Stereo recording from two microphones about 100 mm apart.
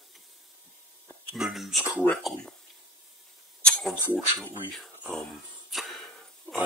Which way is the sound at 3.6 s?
10° left (ahead or behind).